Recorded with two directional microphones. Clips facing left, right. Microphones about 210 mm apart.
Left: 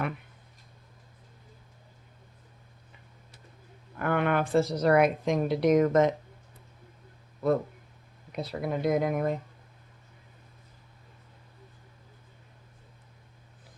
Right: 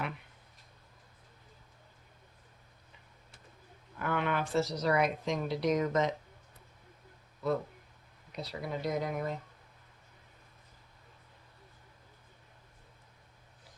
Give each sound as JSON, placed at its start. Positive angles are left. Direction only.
{"t": 3.9, "sound": "a woman's voice", "side_deg": 55}
{"t": 8.4, "sound": "a woman's voice", "side_deg": 55}